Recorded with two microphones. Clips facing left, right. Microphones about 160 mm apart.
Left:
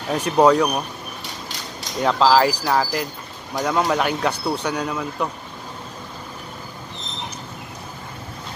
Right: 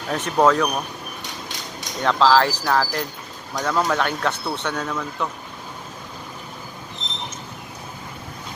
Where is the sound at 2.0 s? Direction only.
5° left (ahead or behind).